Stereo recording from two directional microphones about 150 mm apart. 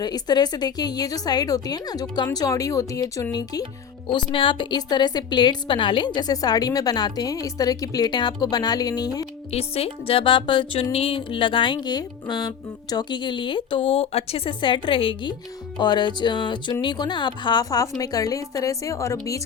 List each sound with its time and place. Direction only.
0.0 s a woman's voice: 25° left (ahead or behind)
4.1 s a woman's voice: 35° left (ahead or behind)
9.5 s a woman's voice: 40° left (ahead or behind); by 19.4 s 20° left (ahead or behind)